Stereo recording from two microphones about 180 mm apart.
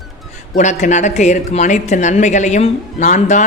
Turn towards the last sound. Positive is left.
turn(degrees=40)  # may be behind; listen again after turning